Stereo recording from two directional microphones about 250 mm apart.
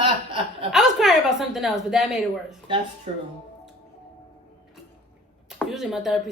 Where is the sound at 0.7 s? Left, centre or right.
Centre.